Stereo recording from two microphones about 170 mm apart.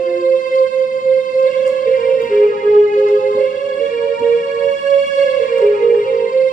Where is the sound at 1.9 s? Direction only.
50° left (ahead or behind).